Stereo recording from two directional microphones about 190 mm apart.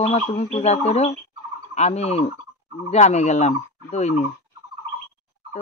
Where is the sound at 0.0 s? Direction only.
35° left (ahead or behind).